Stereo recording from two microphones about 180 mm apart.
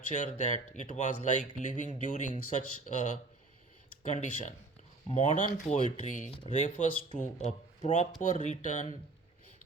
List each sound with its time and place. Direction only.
0.1 s speech: 40° left (ahead or behind)